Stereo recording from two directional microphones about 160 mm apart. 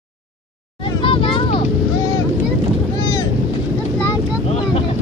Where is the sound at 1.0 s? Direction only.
35° left (ahead or behind).